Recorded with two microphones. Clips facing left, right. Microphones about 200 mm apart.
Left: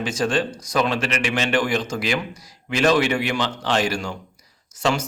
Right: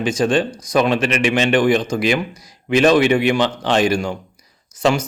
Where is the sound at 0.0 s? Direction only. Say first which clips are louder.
Right 5 dB; 15° right (ahead or behind).